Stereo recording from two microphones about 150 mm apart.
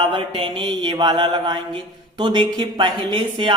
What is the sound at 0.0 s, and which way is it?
Mantra, 35° right (ahead or behind).